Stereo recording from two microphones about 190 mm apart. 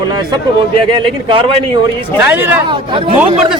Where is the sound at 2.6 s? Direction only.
25° right (ahead or behind).